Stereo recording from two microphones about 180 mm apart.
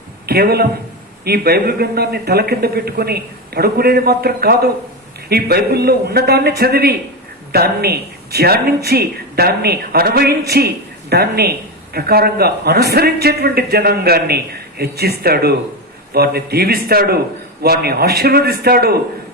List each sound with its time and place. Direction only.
0.3 s a man's voice: 60° right (ahead or behind)